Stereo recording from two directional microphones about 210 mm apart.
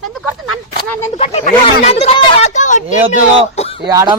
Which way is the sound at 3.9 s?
15° right (ahead or behind).